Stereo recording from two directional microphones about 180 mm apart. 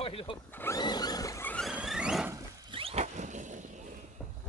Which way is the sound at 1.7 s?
5° right (ahead or behind).